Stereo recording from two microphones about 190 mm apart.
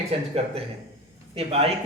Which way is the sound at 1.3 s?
30° right (ahead or behind).